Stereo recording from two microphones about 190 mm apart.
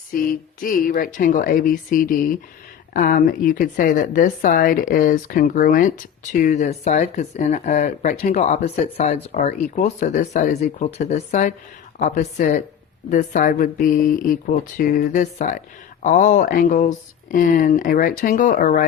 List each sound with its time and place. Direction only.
0.1 s a woman's voice: 50° left (ahead or behind)